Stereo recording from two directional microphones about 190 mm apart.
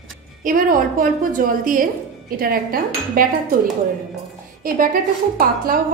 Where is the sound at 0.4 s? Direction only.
45° right (ahead or behind).